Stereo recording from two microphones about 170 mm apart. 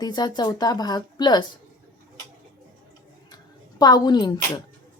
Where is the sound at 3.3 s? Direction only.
25° left (ahead or behind).